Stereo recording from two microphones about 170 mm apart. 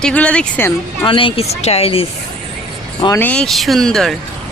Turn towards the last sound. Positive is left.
turn(degrees=0)  # may be behind; listen again after turning